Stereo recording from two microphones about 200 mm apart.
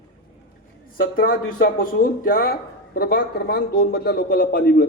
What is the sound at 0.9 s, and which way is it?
Speech, 45° left (ahead or behind).